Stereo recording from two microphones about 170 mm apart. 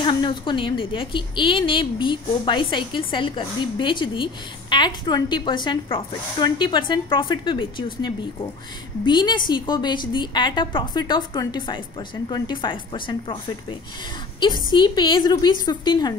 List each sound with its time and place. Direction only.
0.0 s a woman's voice: 30° left (ahead or behind)